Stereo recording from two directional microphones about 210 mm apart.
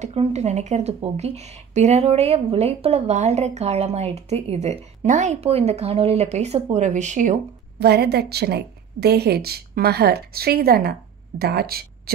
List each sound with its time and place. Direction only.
0.0 s speech: 30° right (ahead or behind)
7.8 s a woman's voice: 50° right (ahead or behind)